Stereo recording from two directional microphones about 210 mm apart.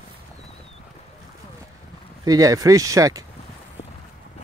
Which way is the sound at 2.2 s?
15° right (ahead or behind).